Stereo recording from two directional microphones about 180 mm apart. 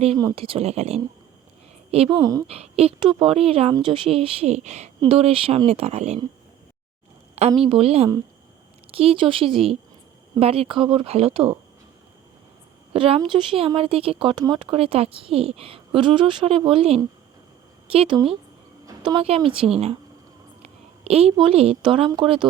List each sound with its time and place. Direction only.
0.3 s a woman's voice: 30° right (ahead or behind)
2.2 s a woman's voice: 20° right (ahead or behind)
2.5 s speech: 35° right (ahead or behind)
7.4 s speech: 35° right (ahead or behind)
12.9 s a woman's voice: 30° right (ahead or behind)
20.6 s a woman's voice: 35° right (ahead or behind)